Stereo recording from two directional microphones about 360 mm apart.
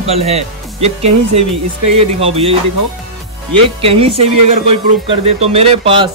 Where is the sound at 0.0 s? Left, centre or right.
Centre.